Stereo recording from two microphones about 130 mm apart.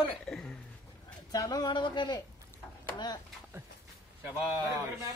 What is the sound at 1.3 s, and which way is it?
Speech, 30° left (ahead or behind).